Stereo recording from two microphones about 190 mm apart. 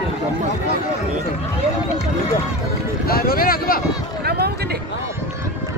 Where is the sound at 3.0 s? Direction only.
50° left (ahead or behind).